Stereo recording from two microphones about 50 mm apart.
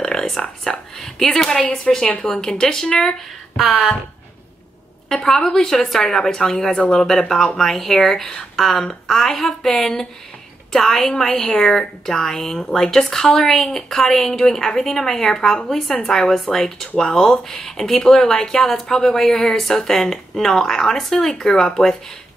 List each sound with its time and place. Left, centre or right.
0.0 s a sound: centre
1.9 s speech: centre
3.5 s speech: centre
5.1 s speech: centre